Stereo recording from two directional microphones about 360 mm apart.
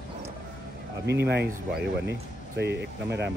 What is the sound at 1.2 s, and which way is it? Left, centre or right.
Speech, right.